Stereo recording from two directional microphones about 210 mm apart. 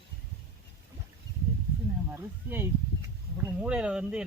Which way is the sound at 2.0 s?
10° right (ahead or behind).